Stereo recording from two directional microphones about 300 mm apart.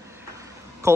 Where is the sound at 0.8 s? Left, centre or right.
Centre.